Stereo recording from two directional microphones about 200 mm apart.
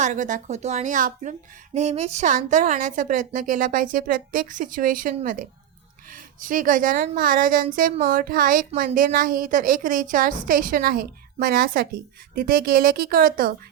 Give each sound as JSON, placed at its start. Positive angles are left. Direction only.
{"t": 0.0, "sound": "a woman's voice", "side_deg": -40}